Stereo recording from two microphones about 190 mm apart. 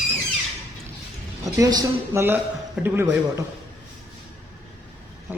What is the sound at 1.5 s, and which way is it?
A woman's voice, 15° right (ahead or behind).